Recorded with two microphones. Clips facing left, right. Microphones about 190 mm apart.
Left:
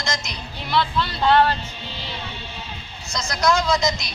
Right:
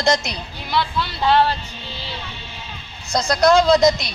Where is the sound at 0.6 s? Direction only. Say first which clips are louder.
Even; centre (ahead or behind).